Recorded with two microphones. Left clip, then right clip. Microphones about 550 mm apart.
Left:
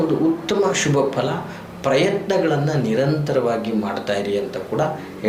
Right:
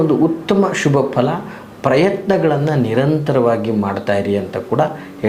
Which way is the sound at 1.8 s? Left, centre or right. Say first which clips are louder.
Right 4 dB; right.